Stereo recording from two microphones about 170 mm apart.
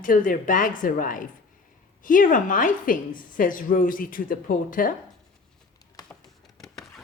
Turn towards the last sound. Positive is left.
turn(degrees=0)  # may be behind; listen again after turning